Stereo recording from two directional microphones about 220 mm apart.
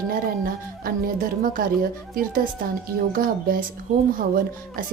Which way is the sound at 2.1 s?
40° right (ahead or behind).